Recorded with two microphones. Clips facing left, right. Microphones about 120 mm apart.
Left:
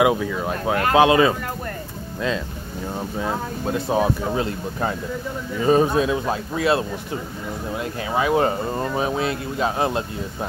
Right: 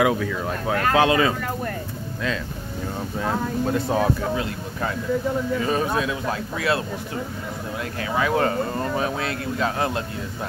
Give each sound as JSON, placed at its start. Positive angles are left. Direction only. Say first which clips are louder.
{"t": 0.0, "sound": "speech", "louder": "left 2 dB", "side_deg": 15}
{"t": 3.0, "sound": "speech", "louder": "right 1 dB", "side_deg": 15}
{"t": 4.4, "sound": "speech", "louder": "left 3 dB", "side_deg": 30}
{"t": 8.0, "sound": "speech", "louder": "left 2 dB", "side_deg": 20}